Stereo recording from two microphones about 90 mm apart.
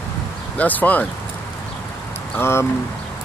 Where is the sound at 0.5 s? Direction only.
20° left (ahead or behind).